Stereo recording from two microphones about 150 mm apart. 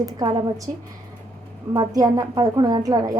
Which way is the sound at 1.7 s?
25° right (ahead or behind).